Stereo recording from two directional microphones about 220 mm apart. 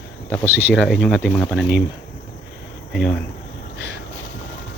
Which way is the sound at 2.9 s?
Centre (ahead or behind).